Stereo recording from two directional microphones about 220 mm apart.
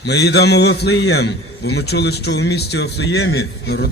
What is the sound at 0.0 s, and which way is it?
A man's voice, 50° left (ahead or behind).